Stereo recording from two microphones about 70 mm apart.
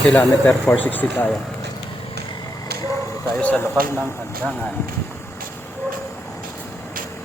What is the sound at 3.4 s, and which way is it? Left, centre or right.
Speech, centre.